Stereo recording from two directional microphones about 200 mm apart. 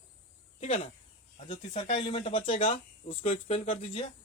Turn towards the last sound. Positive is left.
turn(degrees=30)  # may be behind; listen again after turning